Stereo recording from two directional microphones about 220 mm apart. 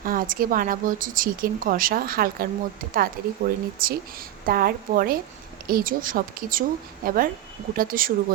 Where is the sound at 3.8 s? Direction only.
40° right (ahead or behind).